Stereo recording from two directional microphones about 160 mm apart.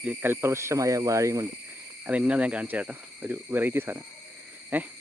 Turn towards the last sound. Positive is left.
turn(degrees=-10)  # may be behind; listen again after turning